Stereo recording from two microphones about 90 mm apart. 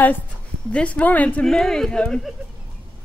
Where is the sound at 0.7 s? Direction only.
10° left (ahead or behind).